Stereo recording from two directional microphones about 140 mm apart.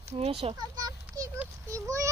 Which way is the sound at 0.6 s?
25° right (ahead or behind).